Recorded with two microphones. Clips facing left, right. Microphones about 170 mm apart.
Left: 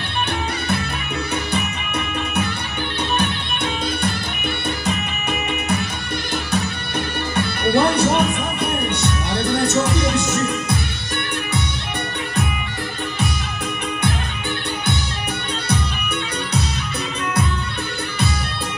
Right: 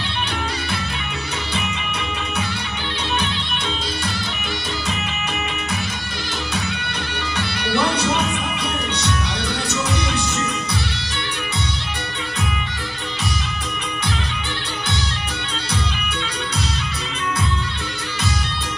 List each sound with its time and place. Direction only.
7.3 s music: 55° left (ahead or behind)